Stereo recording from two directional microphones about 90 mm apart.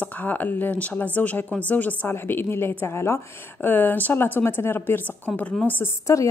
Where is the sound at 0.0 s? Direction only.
20° left (ahead or behind).